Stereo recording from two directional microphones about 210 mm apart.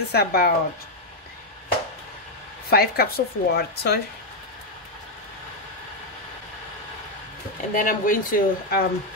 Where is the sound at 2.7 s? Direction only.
45° left (ahead or behind).